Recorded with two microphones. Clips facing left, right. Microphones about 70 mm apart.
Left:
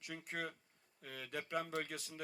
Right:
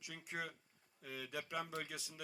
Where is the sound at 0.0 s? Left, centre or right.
Left.